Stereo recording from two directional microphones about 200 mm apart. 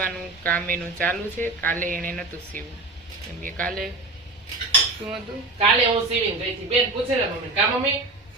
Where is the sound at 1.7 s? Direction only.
40° right (ahead or behind).